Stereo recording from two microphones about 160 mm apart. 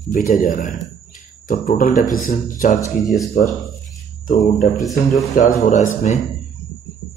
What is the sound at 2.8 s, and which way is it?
Speech, 20° left (ahead or behind).